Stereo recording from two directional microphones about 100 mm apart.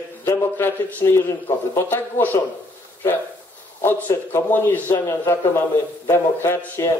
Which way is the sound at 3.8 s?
20° left (ahead or behind).